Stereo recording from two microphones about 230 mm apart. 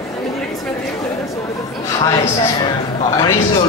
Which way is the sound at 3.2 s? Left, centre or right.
Centre.